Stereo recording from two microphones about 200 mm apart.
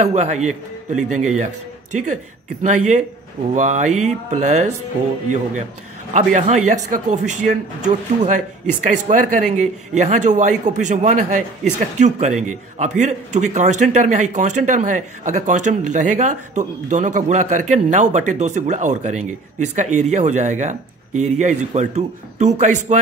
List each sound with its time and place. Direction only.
0.0 s a man's voice: 35° right (ahead or behind)
2.6 s a man's voice: 35° right (ahead or behind)
6.1 s a man's voice: 35° right (ahead or behind)